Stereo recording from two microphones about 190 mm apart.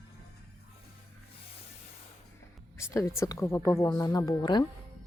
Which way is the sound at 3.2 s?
15° left (ahead or behind).